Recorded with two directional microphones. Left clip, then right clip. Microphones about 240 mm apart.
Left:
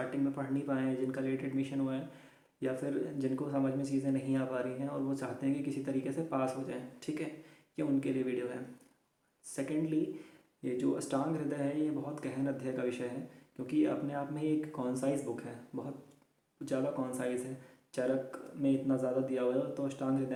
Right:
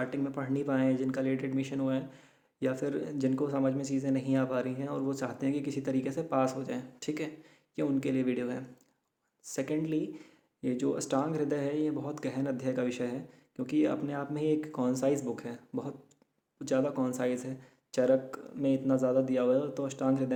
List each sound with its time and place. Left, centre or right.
0.1 s speech: right